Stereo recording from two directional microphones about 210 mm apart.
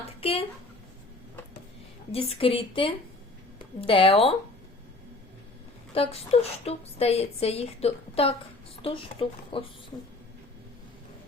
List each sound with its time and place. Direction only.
0.2 s speech: 25° left (ahead or behind)
2.1 s speech: 25° left (ahead or behind)
5.9 s speech: 30° left (ahead or behind)